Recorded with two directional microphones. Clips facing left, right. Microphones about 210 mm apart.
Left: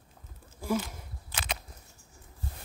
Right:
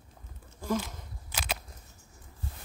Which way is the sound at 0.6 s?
10° left (ahead or behind).